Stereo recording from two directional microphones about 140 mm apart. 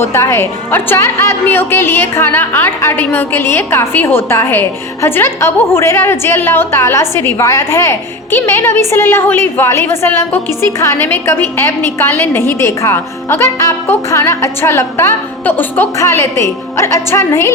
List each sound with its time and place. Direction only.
0.0 s a woman's voice: 20° left (ahead or behind)